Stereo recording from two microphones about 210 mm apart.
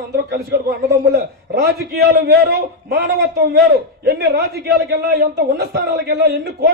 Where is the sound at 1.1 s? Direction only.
50° right (ahead or behind).